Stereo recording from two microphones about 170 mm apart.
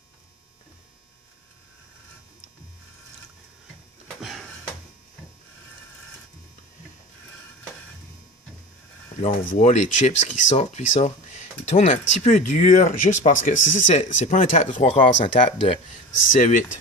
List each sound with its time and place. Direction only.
4.2 s a sound: centre (ahead or behind)
9.2 s speech: 45° left (ahead or behind)
13.6 s speech: 90° left
13.8 s speech: 45° left (ahead or behind)
15.2 s speech: 35° left (ahead or behind)
16.3 s speech: 50° left (ahead or behind)